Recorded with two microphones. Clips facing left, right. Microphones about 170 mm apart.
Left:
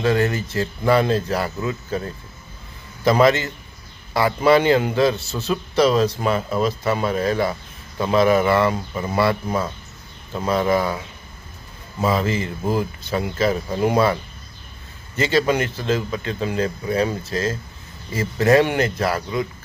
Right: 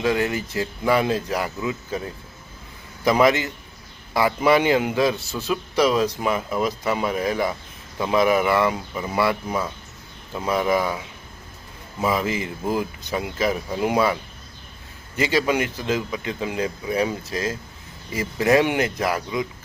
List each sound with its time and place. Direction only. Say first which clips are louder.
0.0 s a man's voice: left 2 dB; 10° right (ahead or behind)